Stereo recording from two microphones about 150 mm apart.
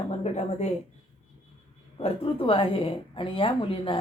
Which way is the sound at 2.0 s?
40° left (ahead or behind).